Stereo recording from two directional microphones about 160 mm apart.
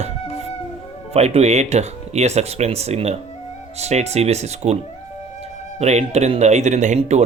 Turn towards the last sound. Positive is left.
turn(degrees=-45)  # may be behind; listen again after turning